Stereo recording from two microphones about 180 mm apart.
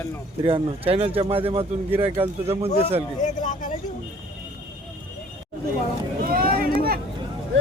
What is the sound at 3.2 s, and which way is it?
Speech, 45° left (ahead or behind).